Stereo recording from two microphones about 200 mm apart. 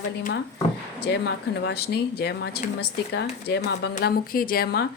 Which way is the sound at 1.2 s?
55° left (ahead or behind).